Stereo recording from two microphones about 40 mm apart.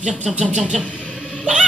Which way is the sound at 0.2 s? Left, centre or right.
Centre.